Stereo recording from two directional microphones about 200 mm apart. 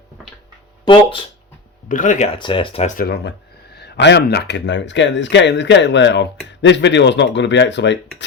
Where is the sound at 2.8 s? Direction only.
50° left (ahead or behind).